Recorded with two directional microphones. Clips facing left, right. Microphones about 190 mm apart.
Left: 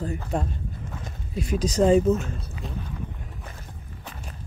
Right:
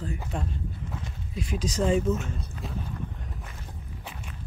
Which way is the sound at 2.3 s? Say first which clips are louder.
Left 1 dB; centre (ahead or behind).